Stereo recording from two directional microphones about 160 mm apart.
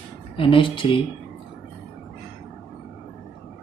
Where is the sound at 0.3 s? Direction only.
35° left (ahead or behind).